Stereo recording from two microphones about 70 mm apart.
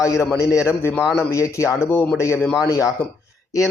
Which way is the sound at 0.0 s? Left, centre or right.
Left.